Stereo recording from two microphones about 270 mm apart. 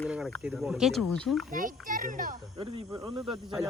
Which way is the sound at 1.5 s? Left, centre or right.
Right.